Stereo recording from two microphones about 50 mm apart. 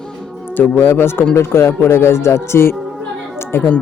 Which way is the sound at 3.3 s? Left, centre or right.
Left.